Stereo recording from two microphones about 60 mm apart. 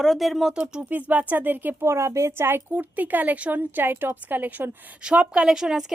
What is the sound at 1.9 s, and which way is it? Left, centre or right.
Speech, right.